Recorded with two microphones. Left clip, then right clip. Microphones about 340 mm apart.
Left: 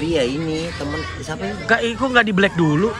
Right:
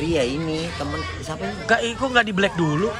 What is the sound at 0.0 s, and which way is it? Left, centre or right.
Speech, centre.